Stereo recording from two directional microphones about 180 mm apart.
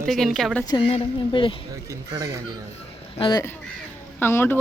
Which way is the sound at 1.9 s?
20° right (ahead or behind).